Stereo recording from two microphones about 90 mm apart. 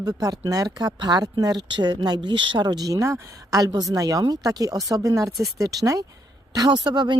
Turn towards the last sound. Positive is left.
turn(degrees=-55)  # may be behind; listen again after turning